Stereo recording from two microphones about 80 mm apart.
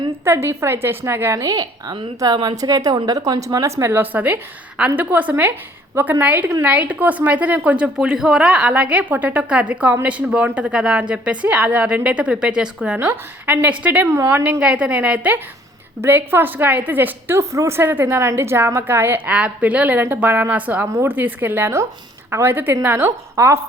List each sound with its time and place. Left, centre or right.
0.3 s a woman's voice: right
1.9 s a woman's voice: right
2.6 s a woman's voice: right
3.4 s a woman's voice: right
3.9 s a woman's voice: right
7.9 s a woman's voice: centre
13.0 s a woman's voice: right
14.1 s a woman's voice: right
14.6 s a woman's voice: centre
16.0 s a woman's voice: right
20.8 s a woman's voice: right
21.1 s a woman's voice: right